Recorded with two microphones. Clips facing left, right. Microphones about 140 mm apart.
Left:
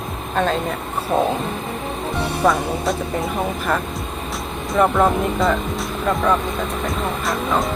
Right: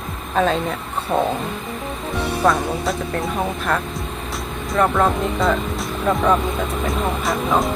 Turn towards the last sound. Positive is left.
turn(degrees=0)  # may be behind; listen again after turning